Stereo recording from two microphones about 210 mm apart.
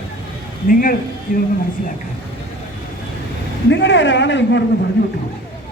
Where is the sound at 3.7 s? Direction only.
60° left (ahead or behind).